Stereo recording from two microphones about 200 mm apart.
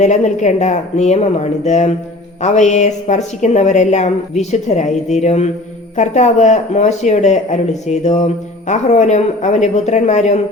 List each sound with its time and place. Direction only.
0.0 s a woman's voice: 35° left (ahead or behind)